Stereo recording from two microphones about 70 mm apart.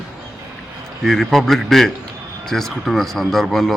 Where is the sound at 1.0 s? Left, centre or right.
Centre.